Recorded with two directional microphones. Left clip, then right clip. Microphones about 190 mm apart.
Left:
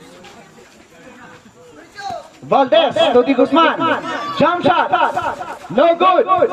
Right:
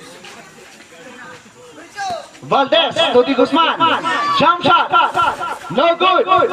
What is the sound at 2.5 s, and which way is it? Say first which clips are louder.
A man's voice: left 1 dB; 60° left (ahead or behind).